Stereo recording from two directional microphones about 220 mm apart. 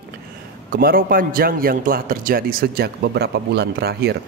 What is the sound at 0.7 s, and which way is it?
A man's voice, 40° right (ahead or behind).